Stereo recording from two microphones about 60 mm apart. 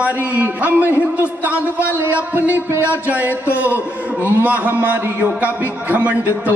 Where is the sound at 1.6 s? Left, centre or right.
Left.